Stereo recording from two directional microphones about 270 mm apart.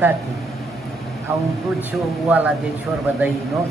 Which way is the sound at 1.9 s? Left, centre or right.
Centre.